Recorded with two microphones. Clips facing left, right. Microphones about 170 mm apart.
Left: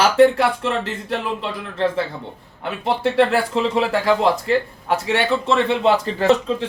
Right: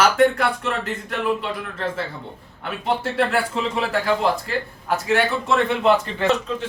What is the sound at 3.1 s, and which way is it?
Speech, 30° left (ahead or behind).